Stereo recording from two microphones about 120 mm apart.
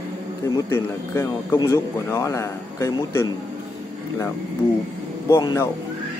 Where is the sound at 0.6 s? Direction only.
20° left (ahead or behind).